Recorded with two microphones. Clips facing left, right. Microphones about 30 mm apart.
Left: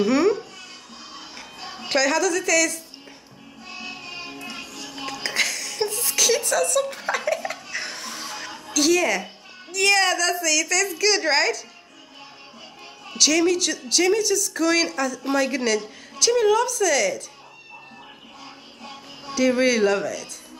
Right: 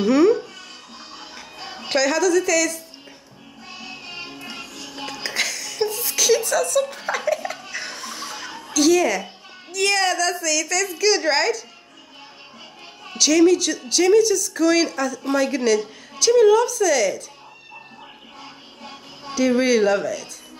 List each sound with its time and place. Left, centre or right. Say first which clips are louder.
0.0 s speech: right 3 dB; centre
1.1 s music: right 1 dB; centre
1.9 s speech: right 2 dB; centre
4.1 s music: even; centre
4.9 s a sound: left 1 dB; centre
7.7 s music: even; centre
8.5 s music: right 2 dB; centre
8.7 s speech: right 3 dB; centre
13.2 s speech: right 4 dB; centre
18.4 s music: right 1 dB; centre
19.3 s speech: right 2 dB; centre